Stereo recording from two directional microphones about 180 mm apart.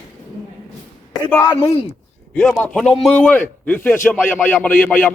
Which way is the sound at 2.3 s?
5° left (ahead or behind).